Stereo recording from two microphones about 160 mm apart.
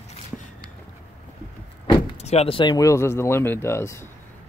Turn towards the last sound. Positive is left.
turn(degrees=15)  # may be behind; listen again after turning